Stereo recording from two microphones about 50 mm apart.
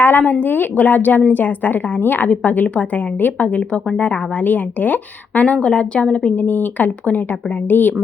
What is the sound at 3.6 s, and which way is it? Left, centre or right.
Speech, centre.